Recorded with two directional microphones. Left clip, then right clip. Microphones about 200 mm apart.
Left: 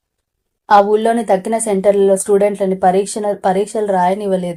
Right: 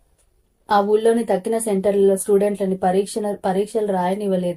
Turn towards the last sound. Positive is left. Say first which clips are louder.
# left 6 dB
turn(degrees=25)  # may be behind; listen again after turning